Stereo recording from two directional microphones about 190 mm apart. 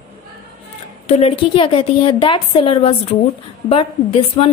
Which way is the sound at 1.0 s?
35° left (ahead or behind).